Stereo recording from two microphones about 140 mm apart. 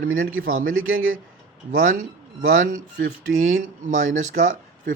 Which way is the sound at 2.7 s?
80° right.